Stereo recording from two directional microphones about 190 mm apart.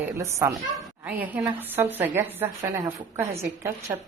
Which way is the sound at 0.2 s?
15° right (ahead or behind).